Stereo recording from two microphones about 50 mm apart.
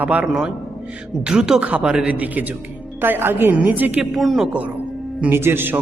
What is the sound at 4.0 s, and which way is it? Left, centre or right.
Speech, centre.